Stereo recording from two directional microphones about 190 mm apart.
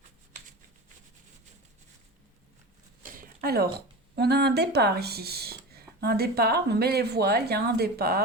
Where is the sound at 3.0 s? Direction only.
50° right (ahead or behind).